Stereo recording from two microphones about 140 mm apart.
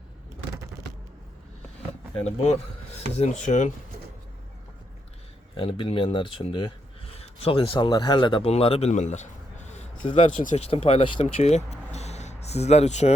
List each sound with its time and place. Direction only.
2.2 s speech: 50° left (ahead or behind)
5.5 s speech: 40° left (ahead or behind); by 13.1 s 55° left (ahead or behind)